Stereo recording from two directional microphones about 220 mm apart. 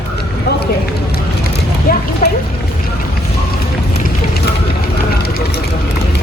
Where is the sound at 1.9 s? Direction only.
40° left (ahead or behind).